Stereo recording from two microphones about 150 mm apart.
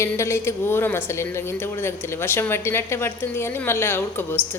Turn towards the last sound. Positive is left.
turn(degrees=15)  # may be behind; listen again after turning